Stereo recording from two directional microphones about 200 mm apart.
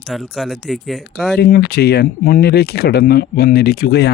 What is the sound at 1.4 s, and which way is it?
Speech, 50° left (ahead or behind).